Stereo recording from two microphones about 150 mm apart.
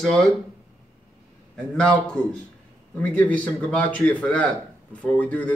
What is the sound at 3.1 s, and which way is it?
Speech, 10° left (ahead or behind).